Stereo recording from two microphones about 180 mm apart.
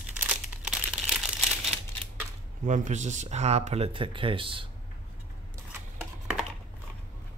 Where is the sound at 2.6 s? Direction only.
45° right (ahead or behind); by 4.7 s 30° right (ahead or behind).